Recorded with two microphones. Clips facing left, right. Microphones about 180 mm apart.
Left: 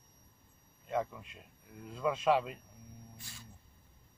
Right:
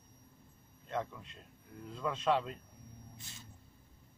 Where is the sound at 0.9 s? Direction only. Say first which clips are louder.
Left 3 dB; 10° left (ahead or behind).